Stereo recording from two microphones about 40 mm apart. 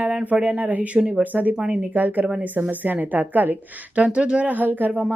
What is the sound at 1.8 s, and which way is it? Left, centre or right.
Speech, right.